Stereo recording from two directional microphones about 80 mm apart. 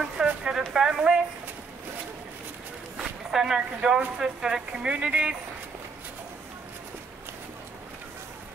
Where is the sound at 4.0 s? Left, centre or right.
Centre.